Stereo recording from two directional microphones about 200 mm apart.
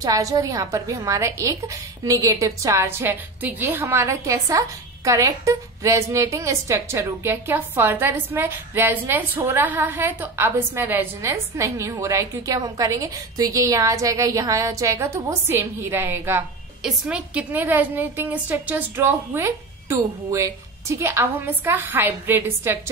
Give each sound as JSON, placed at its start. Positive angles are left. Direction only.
{"t": 0.0, "sound": "a woman's voice", "side_deg": -15}